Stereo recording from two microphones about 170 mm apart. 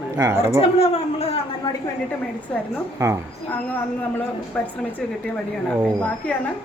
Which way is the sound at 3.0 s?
15° right (ahead or behind).